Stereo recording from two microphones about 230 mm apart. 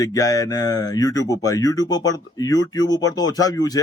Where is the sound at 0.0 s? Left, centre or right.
Centre.